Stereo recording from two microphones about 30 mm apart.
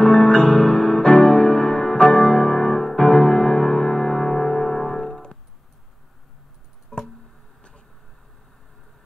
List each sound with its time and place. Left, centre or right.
0.0 s music: left; by 5.2 s centre
6.9 s music: left